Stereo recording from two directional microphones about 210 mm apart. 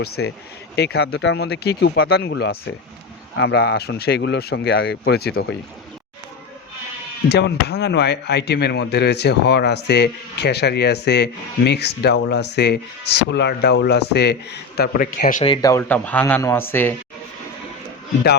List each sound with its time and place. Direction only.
0.0 s speech: 50° left (ahead or behind)
2.2 s speech: 70° left (ahead or behind)
3.3 s speech: 55° left (ahead or behind)
7.3 s speech: 55° left (ahead or behind)
15.4 s speech: 15° left (ahead or behind)